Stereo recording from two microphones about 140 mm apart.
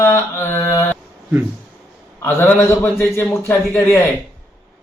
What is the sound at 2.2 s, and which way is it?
Speech, 10° left (ahead or behind).